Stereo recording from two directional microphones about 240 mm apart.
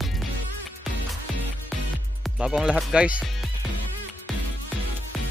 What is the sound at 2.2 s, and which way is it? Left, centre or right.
Speech, centre.